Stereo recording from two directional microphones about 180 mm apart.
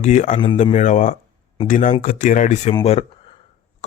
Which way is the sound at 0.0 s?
40° left (ahead or behind).